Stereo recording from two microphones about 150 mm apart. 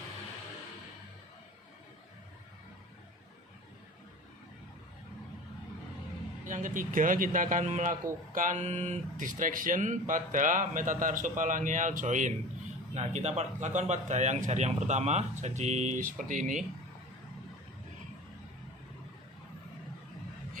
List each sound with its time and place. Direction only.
6.4 s a man's voice: 60° right (ahead or behind)